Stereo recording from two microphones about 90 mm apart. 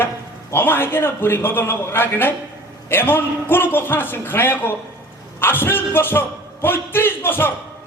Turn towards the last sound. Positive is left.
turn(degrees=25)  # may be behind; listen again after turning